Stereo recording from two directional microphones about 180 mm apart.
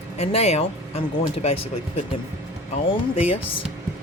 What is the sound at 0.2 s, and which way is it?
Speech, 35° left (ahead or behind).